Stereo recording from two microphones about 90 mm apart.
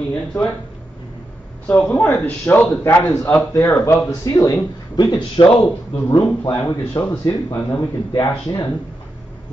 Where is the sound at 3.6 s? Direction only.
35° left (ahead or behind).